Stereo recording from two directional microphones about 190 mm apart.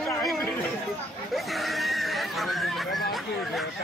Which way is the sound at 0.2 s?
Centre (ahead or behind).